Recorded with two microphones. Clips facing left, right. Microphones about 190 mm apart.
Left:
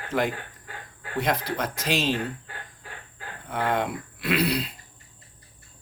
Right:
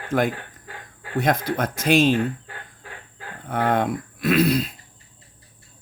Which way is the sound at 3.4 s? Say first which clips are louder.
Right 5 dB; 50° right (ahead or behind).